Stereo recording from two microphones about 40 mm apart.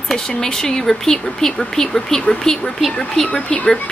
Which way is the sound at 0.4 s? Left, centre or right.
Centre.